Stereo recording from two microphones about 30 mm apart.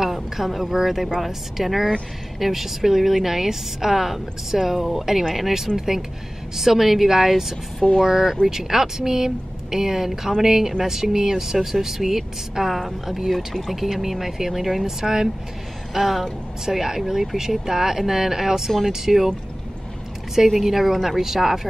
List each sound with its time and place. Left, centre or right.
0.1 s a woman's voice: centre
15.0 s a woman's voice: centre
20.3 s a woman's voice: centre